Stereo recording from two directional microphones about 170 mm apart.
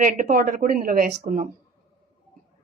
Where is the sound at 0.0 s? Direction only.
55° right (ahead or behind).